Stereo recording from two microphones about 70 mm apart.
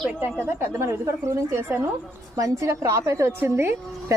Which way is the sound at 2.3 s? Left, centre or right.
Right.